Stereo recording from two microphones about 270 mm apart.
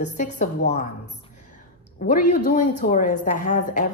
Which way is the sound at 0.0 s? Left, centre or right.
Left.